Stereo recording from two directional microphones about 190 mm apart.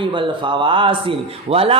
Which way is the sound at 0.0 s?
25° right (ahead or behind).